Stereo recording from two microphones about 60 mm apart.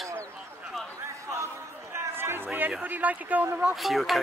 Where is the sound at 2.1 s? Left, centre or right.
Right.